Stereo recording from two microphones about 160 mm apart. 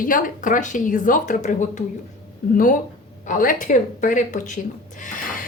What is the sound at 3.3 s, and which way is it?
A woman's voice, 55° left (ahead or behind).